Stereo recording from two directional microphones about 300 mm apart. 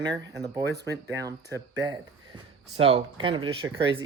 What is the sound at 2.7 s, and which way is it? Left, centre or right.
Speech, centre.